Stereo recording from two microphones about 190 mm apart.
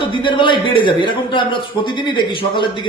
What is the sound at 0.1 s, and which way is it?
A man's voice, 25° left (ahead or behind).